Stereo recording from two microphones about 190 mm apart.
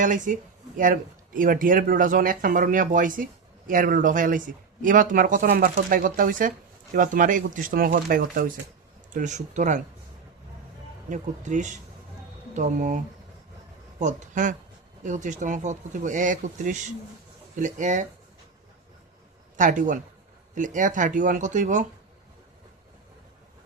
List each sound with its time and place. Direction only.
0.0 s speech: 40° right (ahead or behind)
11.1 s speech: 40° right (ahead or behind)
14.0 s speech: 40° right (ahead or behind)
19.5 s speech: 40° right (ahead or behind)